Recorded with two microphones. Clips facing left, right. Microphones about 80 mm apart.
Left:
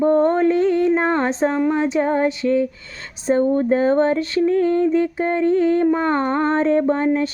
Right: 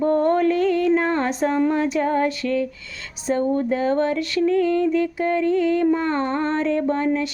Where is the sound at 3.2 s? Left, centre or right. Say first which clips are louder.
Left 4 dB; left.